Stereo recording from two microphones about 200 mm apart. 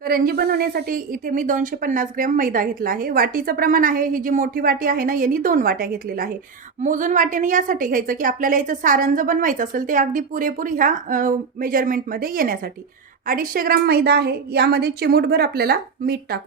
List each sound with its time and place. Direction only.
0.0 s a woman's voice: 50° right (ahead or behind)